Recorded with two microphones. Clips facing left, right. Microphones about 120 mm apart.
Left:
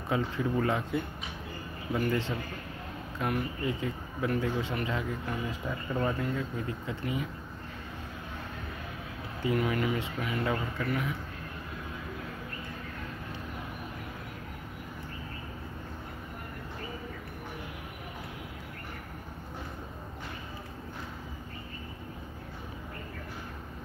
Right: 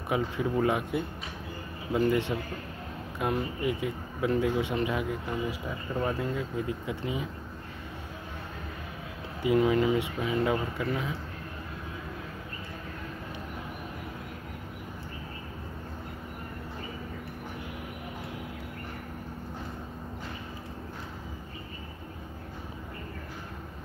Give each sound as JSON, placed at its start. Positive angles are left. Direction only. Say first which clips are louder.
{"t": 0.1, "sound": "speech", "louder": "right 1 dB", "side_deg": -15}
{"t": 6.9, "sound": "speech", "louder": "right 1 dB", "side_deg": -20}
{"t": 9.4, "sound": "speech", "louder": "right 5 dB", "side_deg": -20}